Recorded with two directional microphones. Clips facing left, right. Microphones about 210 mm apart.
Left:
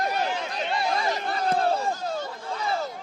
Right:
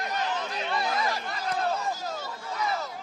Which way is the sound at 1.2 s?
30° left (ahead or behind).